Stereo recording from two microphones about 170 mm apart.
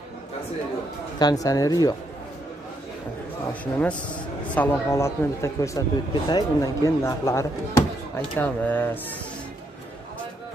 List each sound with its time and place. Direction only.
1.2 s speech: 20° left (ahead or behind)
3.7 s speech: 10° left (ahead or behind)